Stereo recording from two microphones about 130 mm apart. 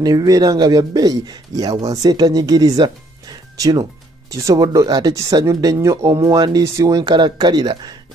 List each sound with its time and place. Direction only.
0.0 s speech: 30° right (ahead or behind)